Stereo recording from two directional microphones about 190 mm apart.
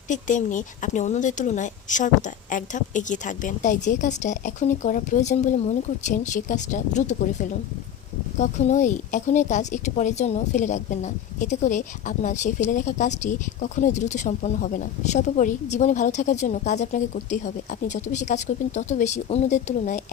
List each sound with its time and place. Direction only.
0.1 s a woman's voice: 40° left (ahead or behind)